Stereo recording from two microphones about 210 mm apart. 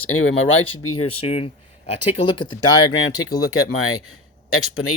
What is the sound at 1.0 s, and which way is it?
Speech, 30° left (ahead or behind).